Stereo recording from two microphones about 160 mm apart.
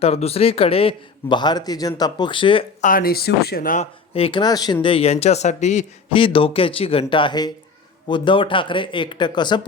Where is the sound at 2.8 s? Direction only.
65° left (ahead or behind).